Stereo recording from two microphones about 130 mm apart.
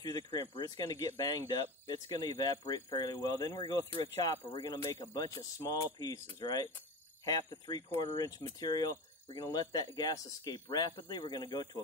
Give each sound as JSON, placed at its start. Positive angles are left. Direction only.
{"t": 0.0, "sound": "speech", "side_deg": 30}